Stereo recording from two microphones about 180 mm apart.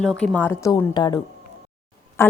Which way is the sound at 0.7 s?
25° left (ahead or behind).